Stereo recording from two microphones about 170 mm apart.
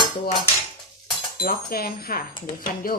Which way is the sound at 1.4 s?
60° left (ahead or behind).